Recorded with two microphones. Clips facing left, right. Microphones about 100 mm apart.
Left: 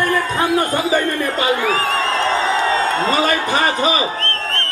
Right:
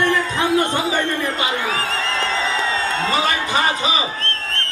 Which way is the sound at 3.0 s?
45° left (ahead or behind).